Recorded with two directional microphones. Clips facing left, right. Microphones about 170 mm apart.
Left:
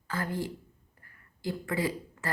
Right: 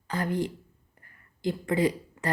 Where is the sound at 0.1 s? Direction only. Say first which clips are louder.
Right 4 dB; 20° right (ahead or behind).